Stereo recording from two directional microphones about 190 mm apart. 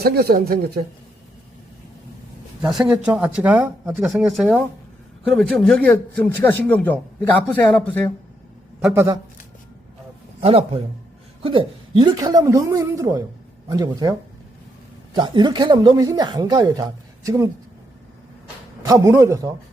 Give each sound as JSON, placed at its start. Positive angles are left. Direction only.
{"t": 0.0, "sound": "speech", "side_deg": -55}
{"t": 2.6, "sound": "a man's voice", "side_deg": -5}
{"t": 8.9, "sound": "a man's voice", "side_deg": -15}
{"t": 10.4, "sound": "a man's voice", "side_deg": -30}
{"t": 18.9, "sound": "a man's voice", "side_deg": -15}